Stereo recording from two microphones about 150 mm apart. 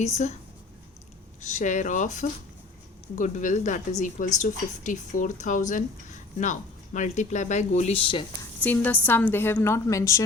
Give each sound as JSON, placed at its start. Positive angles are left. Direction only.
{"t": 0.0, "sound": "speech", "side_deg": 50}
{"t": 1.4, "sound": "speech", "side_deg": 50}
{"t": 8.6, "sound": "a woman's voice", "side_deg": 10}